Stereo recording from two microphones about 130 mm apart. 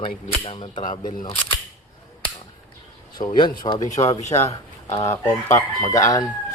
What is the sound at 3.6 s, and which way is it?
Speech, 35° left (ahead or behind).